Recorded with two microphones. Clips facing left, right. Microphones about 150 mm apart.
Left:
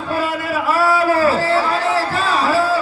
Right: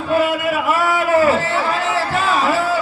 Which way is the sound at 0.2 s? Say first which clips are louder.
Right 3 dB; 35° left (ahead or behind).